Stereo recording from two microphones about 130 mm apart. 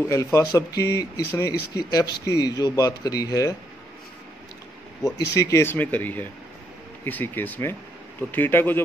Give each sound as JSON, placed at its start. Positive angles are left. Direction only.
{"t": 0.1, "sound": "speech", "side_deg": 25}
{"t": 5.3, "sound": "speech", "side_deg": 25}